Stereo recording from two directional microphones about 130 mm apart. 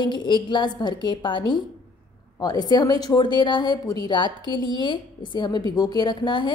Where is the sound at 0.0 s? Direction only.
35° left (ahead or behind).